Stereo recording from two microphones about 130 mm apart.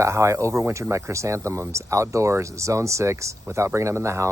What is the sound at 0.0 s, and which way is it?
Speech, 20° right (ahead or behind).